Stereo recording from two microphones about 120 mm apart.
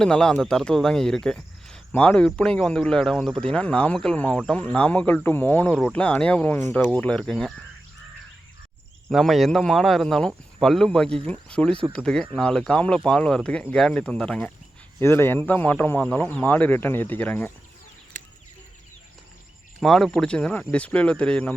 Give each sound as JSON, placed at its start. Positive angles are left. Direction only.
{"t": 0.0, "sound": "speech", "side_deg": 5}
{"t": 9.0, "sound": "speech", "side_deg": 0}
{"t": 15.0, "sound": "speech", "side_deg": 20}
{"t": 19.8, "sound": "speech", "side_deg": 5}